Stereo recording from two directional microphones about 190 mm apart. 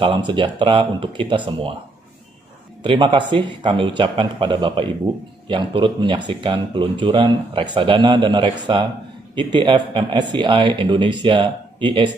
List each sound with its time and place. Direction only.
0.0 s speech: 25° right (ahead or behind)
2.8 s speech: 25° right (ahead or behind)